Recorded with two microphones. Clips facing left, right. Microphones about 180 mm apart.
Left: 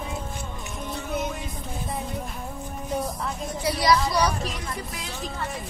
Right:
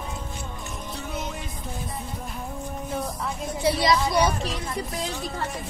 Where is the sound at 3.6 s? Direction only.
25° right (ahead or behind).